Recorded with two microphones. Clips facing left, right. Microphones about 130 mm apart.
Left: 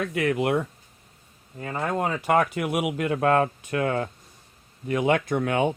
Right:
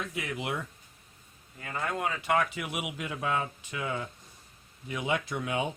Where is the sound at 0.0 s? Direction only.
65° left (ahead or behind).